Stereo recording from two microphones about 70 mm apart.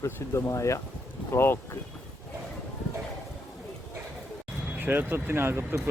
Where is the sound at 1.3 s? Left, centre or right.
Left.